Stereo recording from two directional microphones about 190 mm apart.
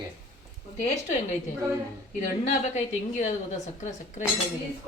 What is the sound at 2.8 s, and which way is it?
A woman's voice, 35° left (ahead or behind).